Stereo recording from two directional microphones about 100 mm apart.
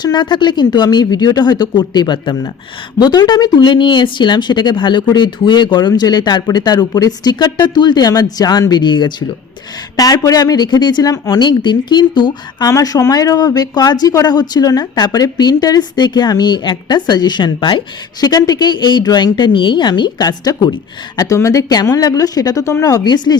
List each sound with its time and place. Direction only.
0.0 s speech: 45° left (ahead or behind)
10.0 s speech: 40° left (ahead or behind)